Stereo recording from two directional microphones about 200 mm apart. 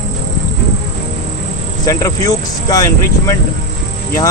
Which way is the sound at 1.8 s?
15° left (ahead or behind).